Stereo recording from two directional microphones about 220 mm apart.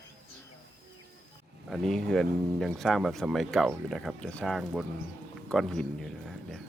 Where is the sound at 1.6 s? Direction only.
Centre (ahead or behind).